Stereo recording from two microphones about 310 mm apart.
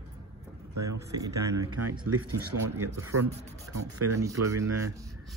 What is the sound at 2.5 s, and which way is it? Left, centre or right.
Speech, right.